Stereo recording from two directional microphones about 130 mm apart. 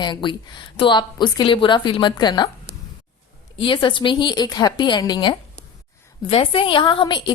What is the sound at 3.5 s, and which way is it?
Speech, 40° left (ahead or behind).